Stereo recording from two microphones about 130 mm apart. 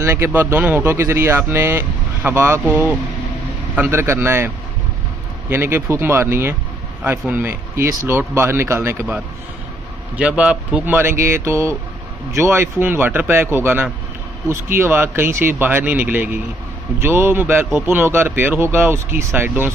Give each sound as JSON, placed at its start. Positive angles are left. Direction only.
{"t": 0.0, "sound": "speech", "side_deg": -20}
{"t": 5.5, "sound": "speech", "side_deg": -20}
{"t": 10.1, "sound": "speech", "side_deg": -10}